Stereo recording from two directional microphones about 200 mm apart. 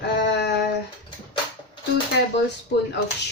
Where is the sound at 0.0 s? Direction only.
55° left (ahead or behind).